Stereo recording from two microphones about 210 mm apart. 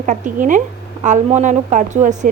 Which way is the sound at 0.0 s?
40° right (ahead or behind).